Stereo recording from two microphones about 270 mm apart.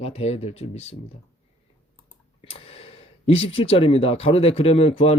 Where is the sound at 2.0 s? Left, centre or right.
Left.